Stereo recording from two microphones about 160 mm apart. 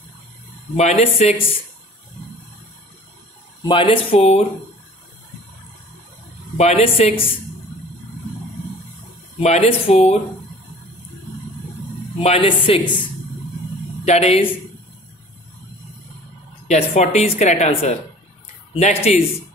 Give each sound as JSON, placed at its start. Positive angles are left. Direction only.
{"t": 0.7, "sound": "speech", "side_deg": 40}
{"t": 3.6, "sound": "speech", "side_deg": 35}
{"t": 6.5, "sound": "a woman's voice", "side_deg": 45}
{"t": 9.4, "sound": "speech", "side_deg": 40}
{"t": 12.2, "sound": "speech", "side_deg": 40}
{"t": 14.0, "sound": "a woman's voice", "side_deg": 45}
{"t": 16.6, "sound": "a woman's voice", "side_deg": 45}